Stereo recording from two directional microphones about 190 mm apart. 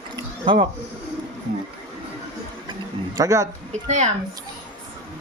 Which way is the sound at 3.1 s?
15° right (ahead or behind).